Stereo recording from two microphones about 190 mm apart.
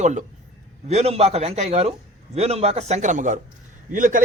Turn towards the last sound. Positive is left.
turn(degrees=-45)  # may be behind; listen again after turning